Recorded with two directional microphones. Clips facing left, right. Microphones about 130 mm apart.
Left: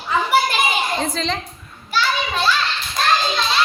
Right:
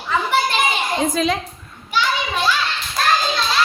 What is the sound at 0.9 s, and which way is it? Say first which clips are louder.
Speech: right 4 dB; 10° right (ahead or behind).